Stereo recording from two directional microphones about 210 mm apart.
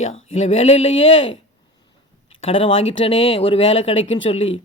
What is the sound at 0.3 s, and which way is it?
Speech, 30° left (ahead or behind).